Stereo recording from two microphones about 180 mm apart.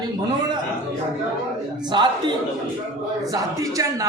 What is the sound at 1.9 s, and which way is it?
Speech, 25° right (ahead or behind).